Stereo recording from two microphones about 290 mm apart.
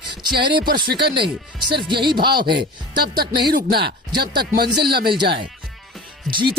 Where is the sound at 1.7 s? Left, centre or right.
Centre.